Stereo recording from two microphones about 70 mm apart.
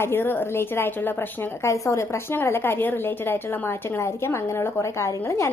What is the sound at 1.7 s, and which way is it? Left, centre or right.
A woman's voice, left.